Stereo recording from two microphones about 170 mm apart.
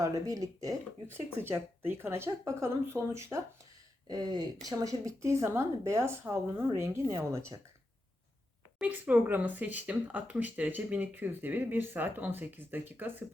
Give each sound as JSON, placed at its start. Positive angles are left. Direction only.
{"t": 0.0, "sound": "speech", "side_deg": -20}
{"t": 8.8, "sound": "speech", "side_deg": -10}